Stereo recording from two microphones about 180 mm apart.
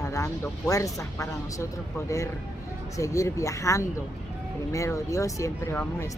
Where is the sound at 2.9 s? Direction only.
15° left (ahead or behind).